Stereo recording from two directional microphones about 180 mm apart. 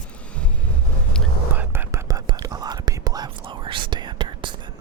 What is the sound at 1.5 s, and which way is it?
Whispering, 10° right (ahead or behind).